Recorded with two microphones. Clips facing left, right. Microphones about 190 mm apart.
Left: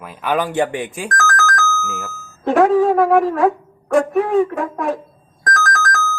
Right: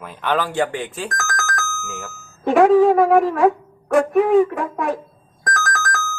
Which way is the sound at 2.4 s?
Centre (ahead or behind).